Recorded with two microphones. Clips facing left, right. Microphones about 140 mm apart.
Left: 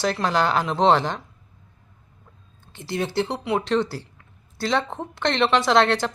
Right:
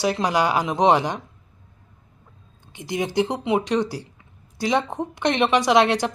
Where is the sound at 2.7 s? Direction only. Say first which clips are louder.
Right 1 dB; 15° right (ahead or behind).